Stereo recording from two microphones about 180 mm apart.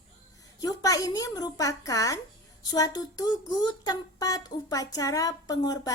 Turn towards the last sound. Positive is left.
turn(degrees=20)  # may be behind; listen again after turning